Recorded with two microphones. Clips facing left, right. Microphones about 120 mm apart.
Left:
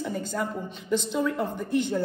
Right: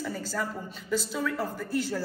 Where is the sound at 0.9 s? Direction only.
5° right (ahead or behind).